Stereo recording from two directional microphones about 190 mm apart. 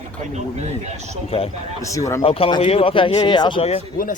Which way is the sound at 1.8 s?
15° left (ahead or behind).